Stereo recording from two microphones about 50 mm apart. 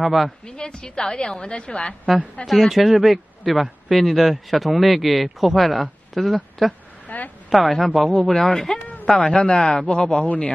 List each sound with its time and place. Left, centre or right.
0.0 s speech: centre
0.5 s a woman's voice: centre
2.4 s speech: centre
7.1 s a sound: left
7.4 s a man's voice: centre
10.2 s a man's voice: left